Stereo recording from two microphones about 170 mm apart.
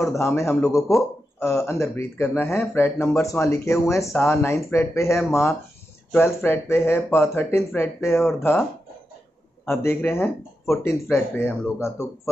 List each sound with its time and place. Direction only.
0.0 s speech: 15° left (ahead or behind)
9.7 s speech: 15° left (ahead or behind)